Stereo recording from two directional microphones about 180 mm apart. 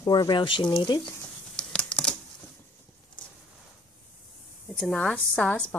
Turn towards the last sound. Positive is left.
turn(degrees=5)  # may be behind; listen again after turning